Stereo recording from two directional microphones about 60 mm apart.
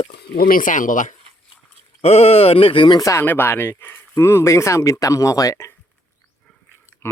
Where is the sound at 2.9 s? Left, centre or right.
Left.